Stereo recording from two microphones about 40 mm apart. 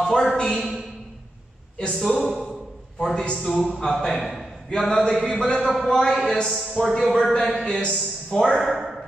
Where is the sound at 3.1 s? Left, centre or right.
Left.